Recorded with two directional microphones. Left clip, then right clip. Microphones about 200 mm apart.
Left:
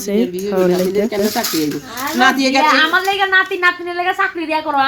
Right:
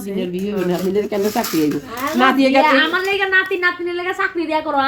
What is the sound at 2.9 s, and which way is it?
A woman's voice, 40° left (ahead or behind).